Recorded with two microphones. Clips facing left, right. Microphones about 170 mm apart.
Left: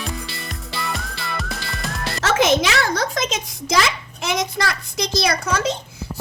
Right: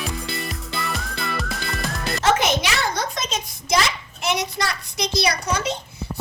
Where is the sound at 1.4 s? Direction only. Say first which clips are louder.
Right 1 dB; centre (ahead or behind).